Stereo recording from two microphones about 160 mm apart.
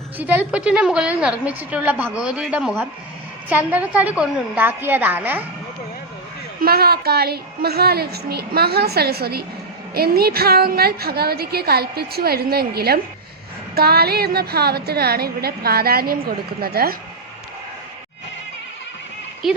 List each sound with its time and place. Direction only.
0.2 s a woman's voice: 10° right (ahead or behind)
6.6 s a woman's voice: 75° right (ahead or behind)
19.4 s speech: 5° right (ahead or behind)